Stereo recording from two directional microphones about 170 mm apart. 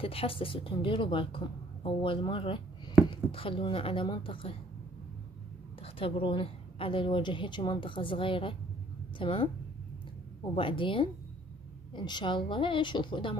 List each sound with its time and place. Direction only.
0.0 s a woman's voice: 35° left (ahead or behind)
5.8 s a woman's voice: 35° left (ahead or behind)
10.5 s a woman's voice: 30° left (ahead or behind)